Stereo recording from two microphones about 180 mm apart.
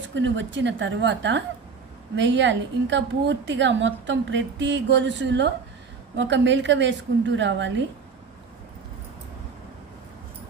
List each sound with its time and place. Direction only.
0.0 s a woman's voice: 90° right